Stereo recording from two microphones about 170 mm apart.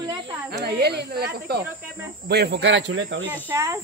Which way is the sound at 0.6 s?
75° right (ahead or behind).